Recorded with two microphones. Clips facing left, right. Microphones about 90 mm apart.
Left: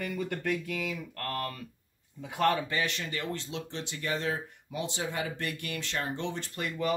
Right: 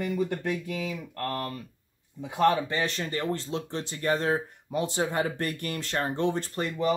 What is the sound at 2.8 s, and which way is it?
Speech, 35° right (ahead or behind).